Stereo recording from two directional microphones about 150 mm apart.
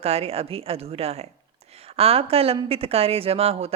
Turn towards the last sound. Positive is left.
turn(degrees=-40)  # may be behind; listen again after turning